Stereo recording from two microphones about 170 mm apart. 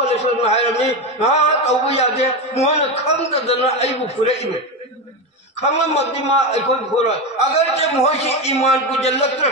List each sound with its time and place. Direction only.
0.0 s a man's voice: 40° left (ahead or behind)
5.7 s a man's voice: 40° left (ahead or behind)